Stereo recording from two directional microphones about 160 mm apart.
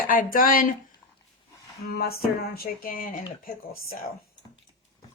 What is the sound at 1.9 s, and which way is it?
Speech, 75° left (ahead or behind).